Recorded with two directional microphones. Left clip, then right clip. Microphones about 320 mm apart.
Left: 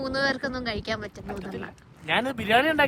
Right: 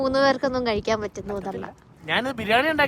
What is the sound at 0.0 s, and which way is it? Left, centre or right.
A woman's voice, centre.